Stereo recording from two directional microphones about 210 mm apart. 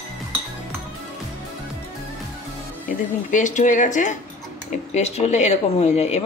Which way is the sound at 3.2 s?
35° left (ahead or behind).